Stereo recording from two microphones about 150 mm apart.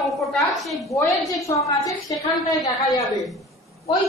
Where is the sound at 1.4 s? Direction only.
20° left (ahead or behind).